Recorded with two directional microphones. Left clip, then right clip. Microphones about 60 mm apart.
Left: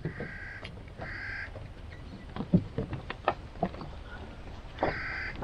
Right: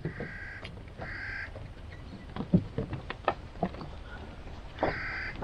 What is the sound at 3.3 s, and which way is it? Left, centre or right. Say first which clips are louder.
Boat: left 1 dB; left.